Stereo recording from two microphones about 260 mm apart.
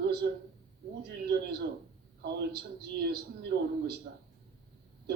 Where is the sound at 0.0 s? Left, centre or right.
Right.